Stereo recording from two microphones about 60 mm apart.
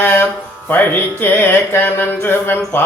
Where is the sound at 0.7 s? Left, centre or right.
Left.